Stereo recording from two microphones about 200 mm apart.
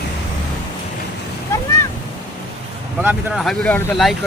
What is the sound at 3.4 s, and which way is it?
Speech, 5° left (ahead or behind).